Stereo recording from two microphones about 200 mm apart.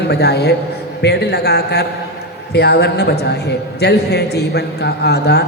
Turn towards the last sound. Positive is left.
turn(degrees=55)  # may be behind; listen again after turning